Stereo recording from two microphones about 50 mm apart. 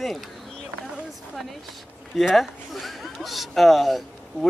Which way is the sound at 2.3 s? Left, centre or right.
Centre.